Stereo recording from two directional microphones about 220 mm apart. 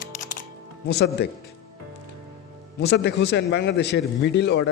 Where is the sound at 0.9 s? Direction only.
50° left (ahead or behind).